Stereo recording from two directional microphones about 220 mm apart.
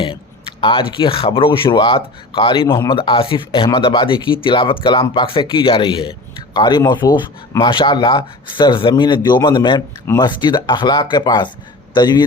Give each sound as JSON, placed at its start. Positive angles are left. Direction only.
{"t": 0.6, "sound": "speech", "side_deg": 20}